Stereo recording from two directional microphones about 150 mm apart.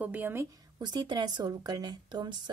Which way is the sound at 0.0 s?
10° right (ahead or behind).